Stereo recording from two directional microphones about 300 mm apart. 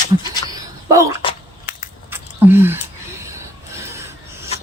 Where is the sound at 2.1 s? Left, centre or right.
Centre.